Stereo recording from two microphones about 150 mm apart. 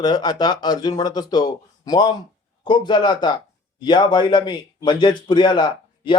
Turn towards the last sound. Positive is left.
turn(degrees=30)  # may be behind; listen again after turning